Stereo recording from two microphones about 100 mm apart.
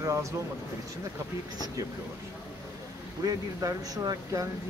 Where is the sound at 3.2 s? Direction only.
35° right (ahead or behind).